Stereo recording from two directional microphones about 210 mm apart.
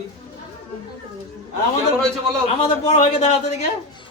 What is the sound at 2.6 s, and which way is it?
A man's voice, 30° left (ahead or behind).